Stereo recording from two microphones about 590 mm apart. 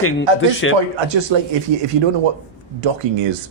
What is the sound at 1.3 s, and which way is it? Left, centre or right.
Speech, right.